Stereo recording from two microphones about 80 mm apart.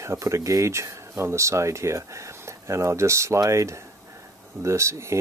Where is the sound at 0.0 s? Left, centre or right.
Right.